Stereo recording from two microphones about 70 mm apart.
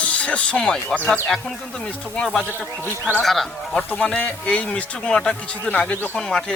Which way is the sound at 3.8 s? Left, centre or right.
Centre.